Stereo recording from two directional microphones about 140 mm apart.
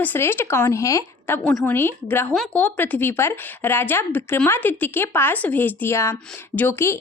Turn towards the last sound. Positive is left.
turn(degrees=15)  # may be behind; listen again after turning